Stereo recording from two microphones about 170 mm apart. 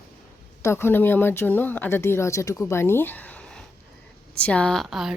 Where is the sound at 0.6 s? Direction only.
15° left (ahead or behind).